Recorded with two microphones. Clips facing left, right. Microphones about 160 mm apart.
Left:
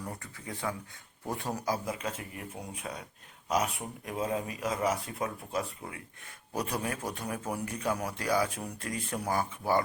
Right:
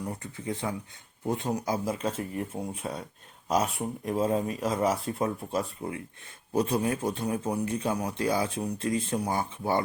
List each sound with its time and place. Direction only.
0.1 s speech: 25° right (ahead or behind)